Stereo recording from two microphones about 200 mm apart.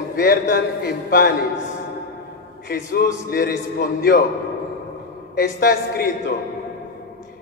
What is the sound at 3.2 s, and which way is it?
A man's voice, 50° left (ahead or behind).